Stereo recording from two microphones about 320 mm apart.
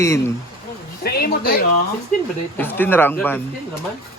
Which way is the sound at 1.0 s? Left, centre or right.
Left.